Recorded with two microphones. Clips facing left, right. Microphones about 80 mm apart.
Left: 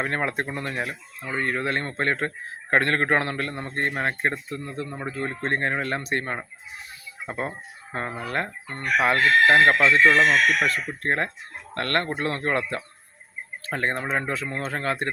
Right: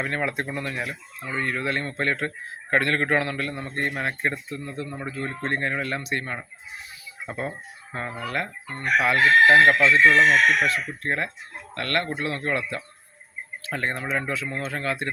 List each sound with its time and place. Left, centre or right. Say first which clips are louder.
0.0 s a man's voice: left 1 dB; left
10.0 s speech: right 1 dB; centre
10.6 s a man's voice: even; left